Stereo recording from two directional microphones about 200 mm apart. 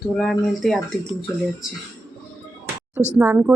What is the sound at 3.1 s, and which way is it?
Speech, 10° right (ahead or behind).